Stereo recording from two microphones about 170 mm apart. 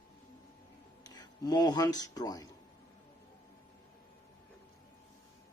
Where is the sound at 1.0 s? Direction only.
20° left (ahead or behind).